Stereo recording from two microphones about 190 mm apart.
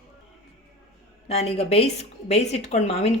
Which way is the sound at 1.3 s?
35° left (ahead or behind).